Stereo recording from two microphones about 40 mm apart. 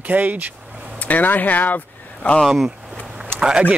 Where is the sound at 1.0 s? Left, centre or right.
Left.